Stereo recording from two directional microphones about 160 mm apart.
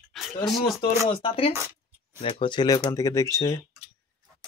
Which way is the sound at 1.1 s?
35° left (ahead or behind).